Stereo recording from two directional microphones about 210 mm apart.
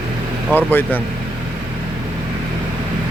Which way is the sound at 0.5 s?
10° left (ahead or behind).